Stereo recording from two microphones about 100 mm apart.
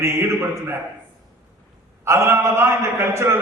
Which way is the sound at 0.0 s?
25° right (ahead or behind).